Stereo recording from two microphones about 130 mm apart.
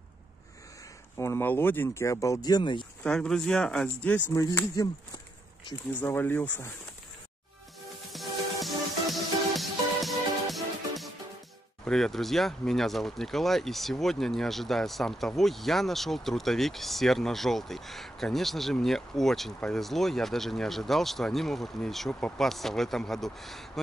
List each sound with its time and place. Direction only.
1.1 s speech: 20° left (ahead or behind); by 2.9 s 35° left (ahead or behind)
3.0 s speech: 5° left (ahead or behind)
4.3 s speech: 25° left (ahead or behind)
5.9 s speech: 15° left (ahead or behind)
8.1 s music: centre (ahead or behind)
11.8 s speech: 5° left (ahead or behind)